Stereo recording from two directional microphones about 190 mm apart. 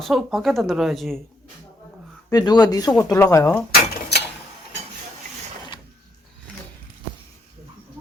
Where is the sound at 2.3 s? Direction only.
20° left (ahead or behind).